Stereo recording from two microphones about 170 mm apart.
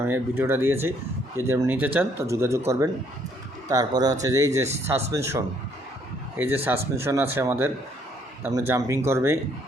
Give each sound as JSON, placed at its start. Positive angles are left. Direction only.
{"t": 0.0, "sound": "speech", "side_deg": -15}